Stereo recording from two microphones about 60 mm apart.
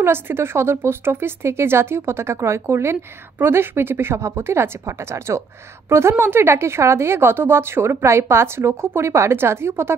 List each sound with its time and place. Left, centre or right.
0.0 s a woman's voice: right